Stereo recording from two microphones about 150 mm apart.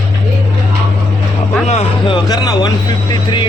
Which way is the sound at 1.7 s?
45° left (ahead or behind).